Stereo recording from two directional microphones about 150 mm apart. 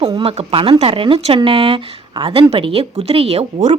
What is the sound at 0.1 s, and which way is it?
A woman's voice, 35° right (ahead or behind).